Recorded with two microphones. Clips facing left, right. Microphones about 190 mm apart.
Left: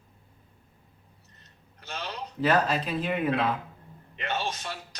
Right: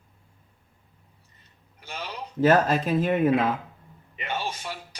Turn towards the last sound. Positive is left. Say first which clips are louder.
# even
turn(degrees=-10)  # may be behind; listen again after turning